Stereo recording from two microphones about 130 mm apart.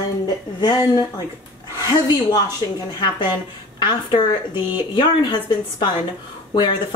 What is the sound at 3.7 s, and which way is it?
Speech, 35° left (ahead or behind).